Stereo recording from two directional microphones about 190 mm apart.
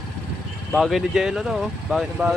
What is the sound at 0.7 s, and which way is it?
Speech, centre (ahead or behind).